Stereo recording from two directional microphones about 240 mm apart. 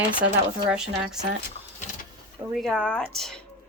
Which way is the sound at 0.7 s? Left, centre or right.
Centre.